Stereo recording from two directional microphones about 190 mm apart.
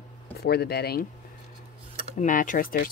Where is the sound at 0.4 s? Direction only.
55° left (ahead or behind).